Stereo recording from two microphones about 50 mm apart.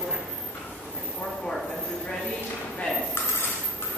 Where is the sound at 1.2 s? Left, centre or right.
Centre.